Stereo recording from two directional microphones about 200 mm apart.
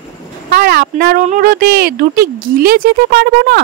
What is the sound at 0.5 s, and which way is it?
Speech, 50° right (ahead or behind).